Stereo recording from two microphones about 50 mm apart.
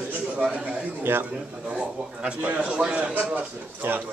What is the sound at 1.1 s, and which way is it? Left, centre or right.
Speech, right.